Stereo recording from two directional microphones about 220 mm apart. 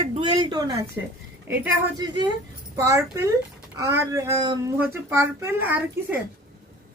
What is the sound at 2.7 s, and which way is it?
A child's voice, 15° right (ahead or behind).